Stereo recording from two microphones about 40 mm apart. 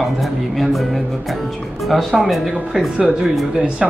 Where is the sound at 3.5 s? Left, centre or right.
Centre.